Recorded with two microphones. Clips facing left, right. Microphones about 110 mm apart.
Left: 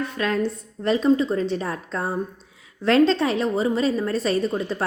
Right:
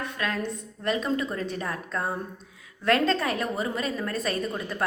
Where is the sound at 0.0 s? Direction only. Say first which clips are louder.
Left 6 dB; 30° left (ahead or behind).